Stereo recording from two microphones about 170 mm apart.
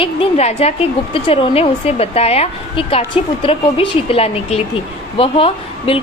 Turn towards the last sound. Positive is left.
turn(degrees=35)  # may be behind; listen again after turning